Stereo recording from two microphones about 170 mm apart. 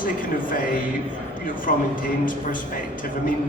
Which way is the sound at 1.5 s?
55° left (ahead or behind).